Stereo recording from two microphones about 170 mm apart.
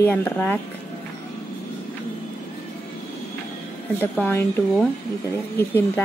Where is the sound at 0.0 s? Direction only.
10° left (ahead or behind).